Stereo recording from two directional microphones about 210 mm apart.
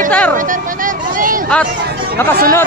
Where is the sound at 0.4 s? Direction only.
40° right (ahead or behind).